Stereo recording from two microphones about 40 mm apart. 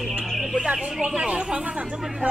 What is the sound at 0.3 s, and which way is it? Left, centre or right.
Bird, centre.